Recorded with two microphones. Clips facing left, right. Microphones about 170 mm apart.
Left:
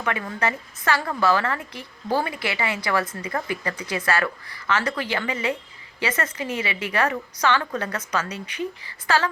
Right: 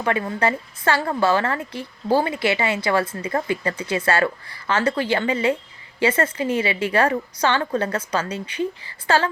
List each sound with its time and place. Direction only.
0.0 s a woman's voice: 30° right (ahead or behind)